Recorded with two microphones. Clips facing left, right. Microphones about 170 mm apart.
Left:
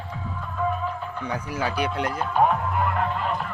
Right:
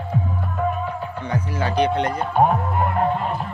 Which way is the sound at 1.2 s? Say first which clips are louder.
Right 3 dB; 10° left (ahead or behind).